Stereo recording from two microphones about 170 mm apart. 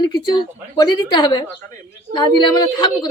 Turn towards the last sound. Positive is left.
turn(degrees=25)  # may be behind; listen again after turning